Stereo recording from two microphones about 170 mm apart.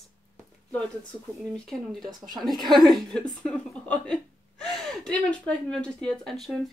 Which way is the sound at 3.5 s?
5° left (ahead or behind).